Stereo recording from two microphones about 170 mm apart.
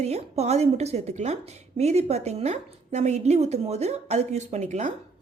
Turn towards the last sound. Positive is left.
turn(degrees=-40)  # may be behind; listen again after turning